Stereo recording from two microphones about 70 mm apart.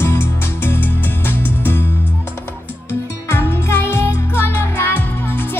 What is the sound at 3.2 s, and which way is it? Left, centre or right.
Music, left.